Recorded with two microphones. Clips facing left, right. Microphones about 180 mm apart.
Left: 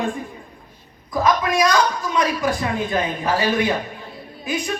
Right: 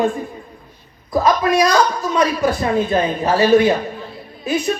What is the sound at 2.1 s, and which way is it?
Speech, 35° right (ahead or behind).